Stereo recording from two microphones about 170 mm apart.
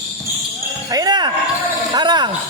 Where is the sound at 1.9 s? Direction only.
25° right (ahead or behind).